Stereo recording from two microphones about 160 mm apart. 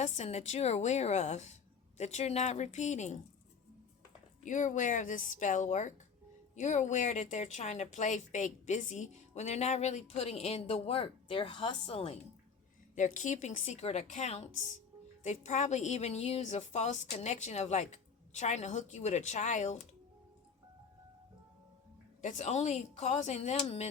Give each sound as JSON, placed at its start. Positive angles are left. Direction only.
{"t": 0.0, "sound": "speech", "side_deg": 45}
{"t": 4.4, "sound": "speech", "side_deg": 50}
{"t": 13.0, "sound": "speech", "side_deg": 50}
{"t": 22.2, "sound": "speech", "side_deg": 50}